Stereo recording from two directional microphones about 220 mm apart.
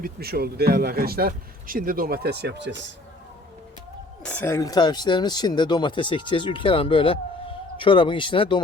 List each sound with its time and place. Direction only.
0.0 s speech: 45° right (ahead or behind)
4.2 s speech: 5° left (ahead or behind); by 8.6 s 20° left (ahead or behind)